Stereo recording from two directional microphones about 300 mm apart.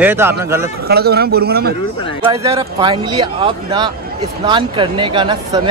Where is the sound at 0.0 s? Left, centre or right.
Centre.